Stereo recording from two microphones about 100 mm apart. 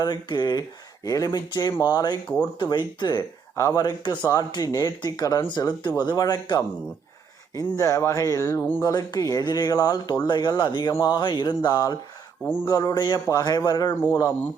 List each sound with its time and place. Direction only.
0.0 s speech: 45° left (ahead or behind)
2.2 s speech: 10° left (ahead or behind)
2.6 s speech: 45° left (ahead or behind)
13.9 s speech: 20° left (ahead or behind)